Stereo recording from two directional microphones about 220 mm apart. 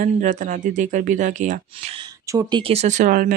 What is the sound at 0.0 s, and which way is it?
Speech, 35° right (ahead or behind).